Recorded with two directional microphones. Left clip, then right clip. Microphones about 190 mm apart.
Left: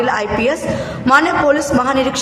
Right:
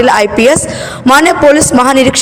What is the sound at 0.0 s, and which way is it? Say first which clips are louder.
A woman's voice: right 9 dB; 45° right (ahead or behind).